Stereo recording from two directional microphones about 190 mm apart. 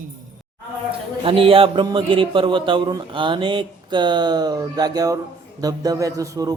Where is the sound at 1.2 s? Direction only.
30° right (ahead or behind).